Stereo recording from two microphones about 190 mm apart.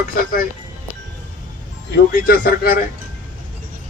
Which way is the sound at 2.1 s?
50° left (ahead or behind).